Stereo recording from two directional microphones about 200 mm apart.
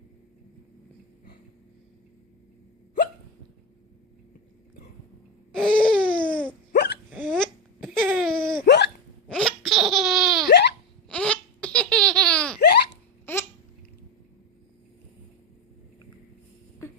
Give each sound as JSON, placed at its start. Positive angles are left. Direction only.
{"t": 5.5, "sound": "a sound", "side_deg": 5}
{"t": 6.7, "sound": "hiccup", "side_deg": 55}
{"t": 7.3, "sound": "cough", "side_deg": 5}
{"t": 7.9, "sound": "a sound", "side_deg": 0}
{"t": 8.6, "sound": "hiccup", "side_deg": 55}
{"t": 9.3, "sound": "laughter", "side_deg": 5}
{"t": 10.5, "sound": "laughter", "side_deg": 55}
{"t": 11.1, "sound": "baby laughter", "side_deg": 5}
{"t": 12.5, "sound": "hiccup", "side_deg": 50}